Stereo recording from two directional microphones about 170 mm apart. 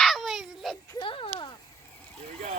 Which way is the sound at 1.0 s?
30° left (ahead or behind).